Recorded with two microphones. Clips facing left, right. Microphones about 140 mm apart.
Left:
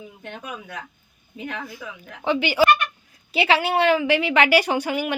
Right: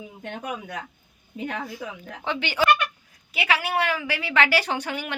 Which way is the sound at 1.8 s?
30° right (ahead or behind).